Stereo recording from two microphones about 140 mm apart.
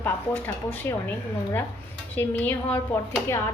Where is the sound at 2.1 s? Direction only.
15° left (ahead or behind).